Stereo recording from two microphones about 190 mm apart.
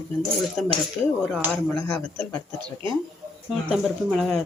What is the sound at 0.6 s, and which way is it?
Speech, 5° left (ahead or behind).